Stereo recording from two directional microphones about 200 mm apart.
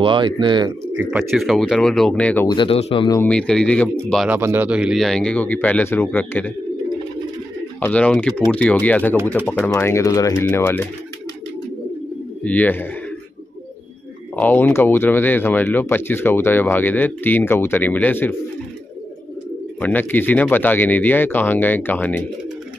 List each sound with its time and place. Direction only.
0.0 s speech: 25° right (ahead or behind)
0.9 s speech: 5° right (ahead or behind)
2.4 s speech: 25° left (ahead or behind)
3.2 s speech: 5° left (ahead or behind)
4.4 s speech: 10° right (ahead or behind); by 6.5 s 10° left (ahead or behind)
7.8 s speech: 5° left (ahead or behind)
12.4 s speech: 10° left (ahead or behind)
14.3 s speech: 10° left (ahead or behind)
19.8 s speech: 10° left (ahead or behind)